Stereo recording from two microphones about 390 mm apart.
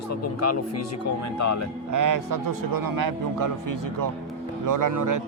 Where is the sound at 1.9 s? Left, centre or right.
Right.